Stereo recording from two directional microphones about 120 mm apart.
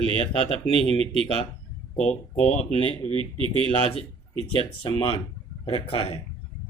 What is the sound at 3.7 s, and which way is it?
Speech, 55° left (ahead or behind).